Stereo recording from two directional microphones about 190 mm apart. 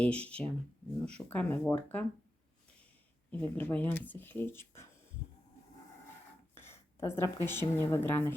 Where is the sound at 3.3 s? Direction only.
10° left (ahead or behind).